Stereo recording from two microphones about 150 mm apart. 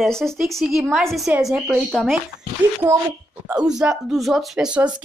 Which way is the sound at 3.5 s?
5° right (ahead or behind).